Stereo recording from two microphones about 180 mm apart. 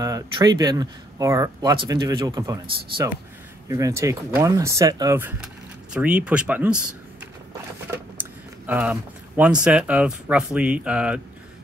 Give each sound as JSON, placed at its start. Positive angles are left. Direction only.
{"t": 0.0, "sound": "speech", "side_deg": -20}
{"t": 8.2, "sound": "a sound", "side_deg": -10}
{"t": 9.4, "sound": "speech", "side_deg": -5}